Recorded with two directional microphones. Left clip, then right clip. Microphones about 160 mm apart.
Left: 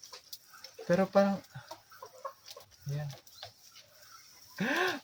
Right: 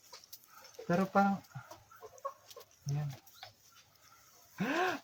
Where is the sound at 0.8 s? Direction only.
10° right (ahead or behind).